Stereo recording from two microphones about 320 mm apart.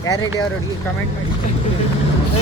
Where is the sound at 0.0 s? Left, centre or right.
Centre.